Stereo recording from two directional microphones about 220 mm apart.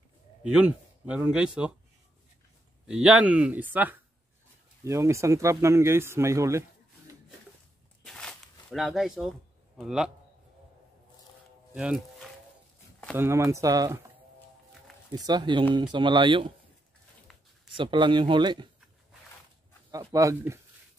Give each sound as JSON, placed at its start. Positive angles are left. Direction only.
{"t": 0.4, "sound": "speech", "side_deg": -5}
{"t": 2.9, "sound": "speech", "side_deg": -5}
{"t": 8.0, "sound": "a sound", "side_deg": 5}
{"t": 9.8, "sound": "speech", "side_deg": 0}
{"t": 11.7, "sound": "speech", "side_deg": -5}
{"t": 15.0, "sound": "speech", "side_deg": -20}
{"t": 17.7, "sound": "speech", "side_deg": -20}
{"t": 19.9, "sound": "speech", "side_deg": -15}